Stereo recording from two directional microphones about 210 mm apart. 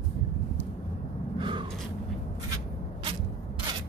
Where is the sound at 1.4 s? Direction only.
20° right (ahead or behind).